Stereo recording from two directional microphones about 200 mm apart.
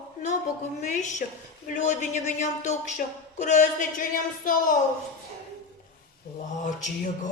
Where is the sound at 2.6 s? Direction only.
40° left (ahead or behind).